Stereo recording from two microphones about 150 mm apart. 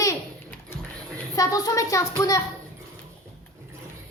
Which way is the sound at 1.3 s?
25° left (ahead or behind).